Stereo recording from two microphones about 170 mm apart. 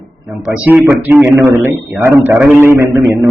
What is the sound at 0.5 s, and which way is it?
A man's voice, 10° right (ahead or behind).